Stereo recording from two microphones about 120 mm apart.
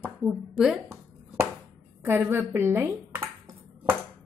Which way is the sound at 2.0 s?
15° right (ahead or behind).